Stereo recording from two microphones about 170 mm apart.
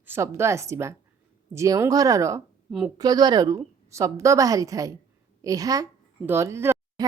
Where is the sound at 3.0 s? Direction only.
25° right (ahead or behind).